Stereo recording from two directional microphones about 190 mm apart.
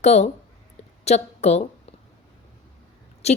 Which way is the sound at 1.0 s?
35° left (ahead or behind).